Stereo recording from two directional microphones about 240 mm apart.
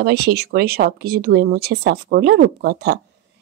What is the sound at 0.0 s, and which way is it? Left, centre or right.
A woman's voice, right.